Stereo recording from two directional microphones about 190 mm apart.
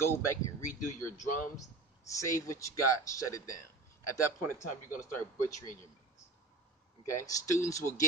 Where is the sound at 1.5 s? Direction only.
15° left (ahead or behind).